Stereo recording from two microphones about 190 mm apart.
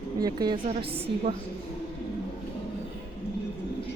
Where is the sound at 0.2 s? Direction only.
20° right (ahead or behind).